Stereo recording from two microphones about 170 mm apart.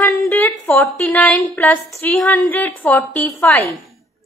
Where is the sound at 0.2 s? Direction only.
10° left (ahead or behind).